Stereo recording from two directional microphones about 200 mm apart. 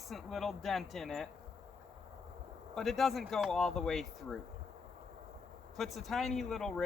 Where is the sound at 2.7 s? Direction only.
Centre (ahead or behind).